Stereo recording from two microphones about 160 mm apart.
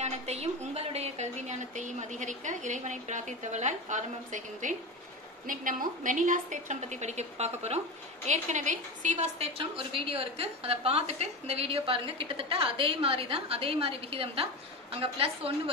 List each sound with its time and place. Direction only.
0.0 s a woman's voice: 40° right (ahead or behind)